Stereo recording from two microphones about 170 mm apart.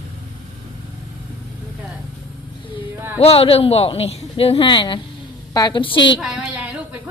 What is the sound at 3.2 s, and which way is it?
A man's voice, 35° left (ahead or behind).